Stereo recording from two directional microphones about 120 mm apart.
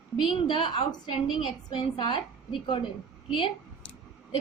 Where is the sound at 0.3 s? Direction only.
50° left (ahead or behind).